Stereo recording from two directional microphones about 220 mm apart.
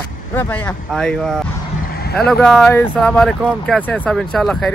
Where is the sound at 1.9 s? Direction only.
45° left (ahead or behind).